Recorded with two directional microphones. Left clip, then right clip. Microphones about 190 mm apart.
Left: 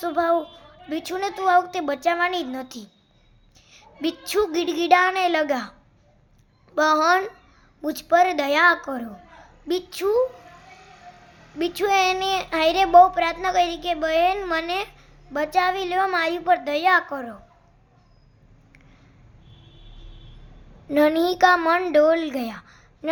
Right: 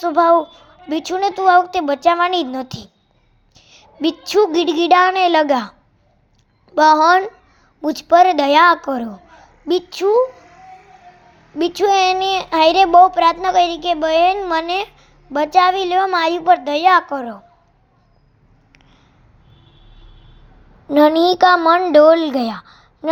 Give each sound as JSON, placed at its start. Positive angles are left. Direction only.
{"t": 0.0, "sound": "a woman's voice", "side_deg": -20}
{"t": 3.5, "sound": "a sound", "side_deg": -20}
{"t": 4.5, "sound": "a woman's voice", "side_deg": -20}
{"t": 6.7, "sound": "a woman's voice", "side_deg": -20}
{"t": 11.5, "sound": "a child's voice", "side_deg": -15}
{"t": 20.9, "sound": "a woman's voice", "side_deg": -20}